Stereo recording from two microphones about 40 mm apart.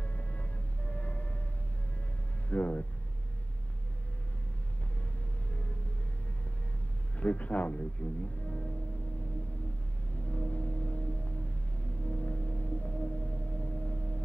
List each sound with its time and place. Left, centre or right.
0.0 s music: left
2.5 s speech: left
5.5 s vehicle: left
7.2 s speech: left
10.2 s music: left